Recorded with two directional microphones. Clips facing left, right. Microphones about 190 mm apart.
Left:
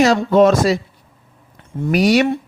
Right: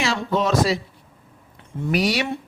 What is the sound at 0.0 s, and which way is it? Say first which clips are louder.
Speech: left 10 dB; 45° left (ahead or behind).